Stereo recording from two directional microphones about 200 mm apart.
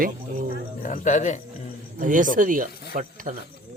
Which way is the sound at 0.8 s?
40° left (ahead or behind).